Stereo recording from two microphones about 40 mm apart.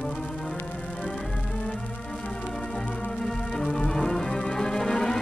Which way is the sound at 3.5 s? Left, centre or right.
Centre.